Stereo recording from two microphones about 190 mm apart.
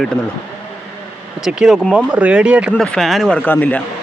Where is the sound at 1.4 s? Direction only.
5° right (ahead or behind).